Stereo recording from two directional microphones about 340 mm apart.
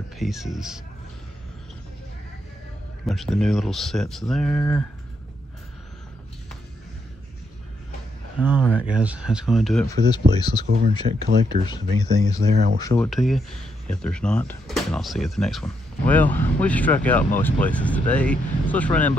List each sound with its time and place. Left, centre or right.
0.2 s speech: centre
3.1 s speech: centre
8.4 s speech: centre
10.7 s speech: right
11.6 s speech: centre